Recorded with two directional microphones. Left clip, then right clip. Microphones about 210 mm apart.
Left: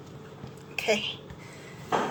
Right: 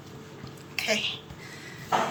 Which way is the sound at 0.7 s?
50° left (ahead or behind).